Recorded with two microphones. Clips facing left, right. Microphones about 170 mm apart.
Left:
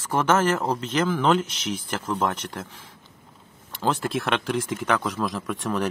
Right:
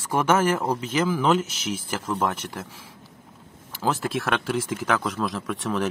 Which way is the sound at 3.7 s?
5° right (ahead or behind).